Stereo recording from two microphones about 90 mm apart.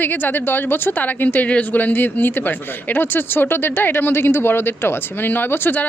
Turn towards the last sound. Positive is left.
turn(degrees=20)  # may be behind; listen again after turning